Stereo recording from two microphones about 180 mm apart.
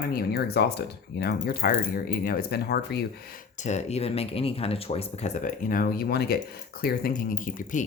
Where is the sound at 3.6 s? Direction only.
40° left (ahead or behind).